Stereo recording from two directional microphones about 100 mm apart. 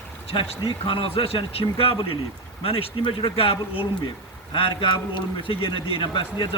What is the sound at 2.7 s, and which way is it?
A man's voice, 70° left (ahead or behind).